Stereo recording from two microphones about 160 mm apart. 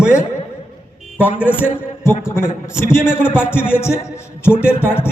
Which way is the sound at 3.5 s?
15° left (ahead or behind).